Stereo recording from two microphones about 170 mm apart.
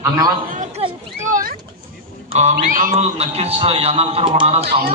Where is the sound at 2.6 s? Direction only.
50° right (ahead or behind).